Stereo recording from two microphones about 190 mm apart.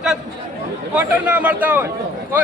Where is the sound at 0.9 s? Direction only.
10° right (ahead or behind).